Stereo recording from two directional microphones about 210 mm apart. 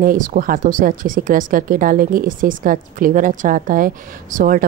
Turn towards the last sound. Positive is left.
turn(degrees=-40)  # may be behind; listen again after turning